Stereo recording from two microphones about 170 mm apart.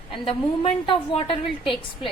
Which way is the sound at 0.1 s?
30° left (ahead or behind).